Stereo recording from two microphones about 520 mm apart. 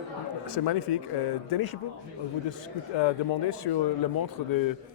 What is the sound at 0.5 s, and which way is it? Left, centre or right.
Speech, left.